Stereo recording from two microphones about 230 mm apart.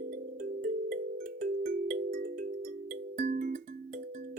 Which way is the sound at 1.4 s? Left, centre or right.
Right.